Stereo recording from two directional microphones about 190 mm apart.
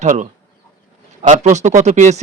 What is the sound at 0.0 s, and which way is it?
Speech, 40° right (ahead or behind).